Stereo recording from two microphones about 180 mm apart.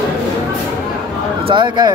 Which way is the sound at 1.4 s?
25° right (ahead or behind).